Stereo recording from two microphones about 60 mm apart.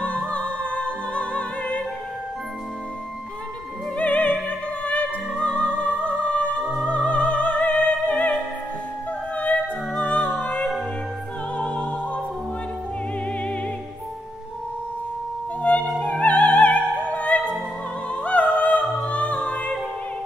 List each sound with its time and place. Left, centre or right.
0.0 s music: left
3.9 s music: left
15.7 s music: left